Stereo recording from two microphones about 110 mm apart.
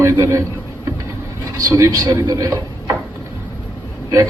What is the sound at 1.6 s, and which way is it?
Speech, 30° right (ahead or behind).